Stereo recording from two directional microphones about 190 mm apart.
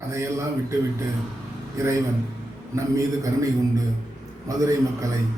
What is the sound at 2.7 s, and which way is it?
A man's voice, 15° right (ahead or behind).